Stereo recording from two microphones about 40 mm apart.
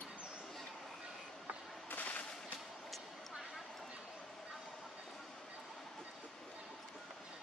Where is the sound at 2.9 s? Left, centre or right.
Centre.